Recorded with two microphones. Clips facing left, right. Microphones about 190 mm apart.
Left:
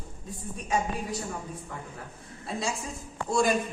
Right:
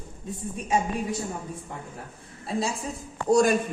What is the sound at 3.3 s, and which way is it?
Speech, 45° right (ahead or behind).